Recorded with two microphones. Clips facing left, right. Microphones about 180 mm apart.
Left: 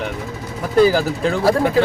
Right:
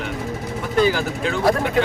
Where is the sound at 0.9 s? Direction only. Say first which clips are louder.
Left 4 dB; 35° left (ahead or behind).